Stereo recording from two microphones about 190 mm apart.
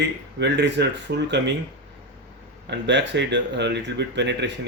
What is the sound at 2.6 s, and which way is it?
Speech, 65° right (ahead or behind).